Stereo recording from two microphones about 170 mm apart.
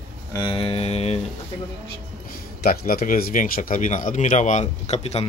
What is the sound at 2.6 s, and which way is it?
Speech, 60° left (ahead or behind).